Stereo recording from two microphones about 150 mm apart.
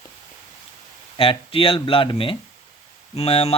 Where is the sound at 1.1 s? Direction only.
35° left (ahead or behind).